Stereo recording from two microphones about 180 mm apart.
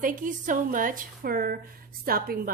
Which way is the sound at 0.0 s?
45° right (ahead or behind).